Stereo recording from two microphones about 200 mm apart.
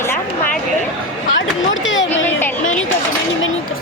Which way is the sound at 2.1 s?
10° left (ahead or behind).